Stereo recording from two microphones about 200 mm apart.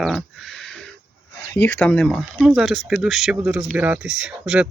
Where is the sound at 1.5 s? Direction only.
10° left (ahead or behind).